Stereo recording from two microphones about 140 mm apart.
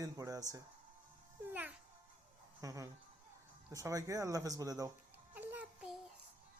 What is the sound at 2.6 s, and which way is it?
Speech, 25° right (ahead or behind).